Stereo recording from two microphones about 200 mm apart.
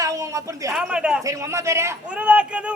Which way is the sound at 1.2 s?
15° right (ahead or behind).